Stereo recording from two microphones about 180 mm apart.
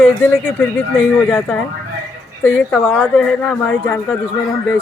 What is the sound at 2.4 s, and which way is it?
Speech, 10° left (ahead or behind).